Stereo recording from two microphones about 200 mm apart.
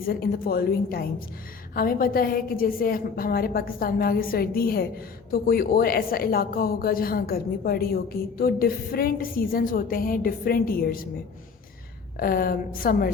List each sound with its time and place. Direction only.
0.1 s a woman's voice: 50° left (ahead or behind)
12.2 s a woman's voice: 50° left (ahead or behind)